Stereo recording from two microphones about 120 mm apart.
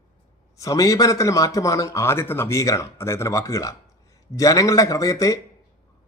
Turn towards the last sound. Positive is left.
turn(degrees=30)  # may be behind; listen again after turning